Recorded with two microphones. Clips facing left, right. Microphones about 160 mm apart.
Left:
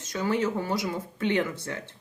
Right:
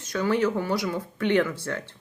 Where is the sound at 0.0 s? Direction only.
20° left (ahead or behind).